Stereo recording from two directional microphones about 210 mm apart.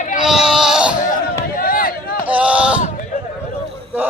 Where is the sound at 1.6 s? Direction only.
45° left (ahead or behind).